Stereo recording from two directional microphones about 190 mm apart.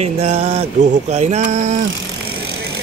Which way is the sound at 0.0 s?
35° right (ahead or behind).